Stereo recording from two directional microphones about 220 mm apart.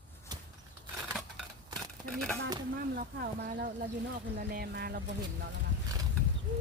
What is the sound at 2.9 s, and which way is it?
Speech, 45° right (ahead or behind).